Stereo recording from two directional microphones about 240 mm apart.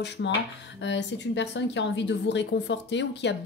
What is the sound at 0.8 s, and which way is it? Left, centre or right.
A woman's voice, left.